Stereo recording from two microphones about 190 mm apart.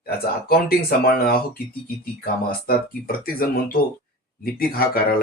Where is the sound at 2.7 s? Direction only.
50° left (ahead or behind).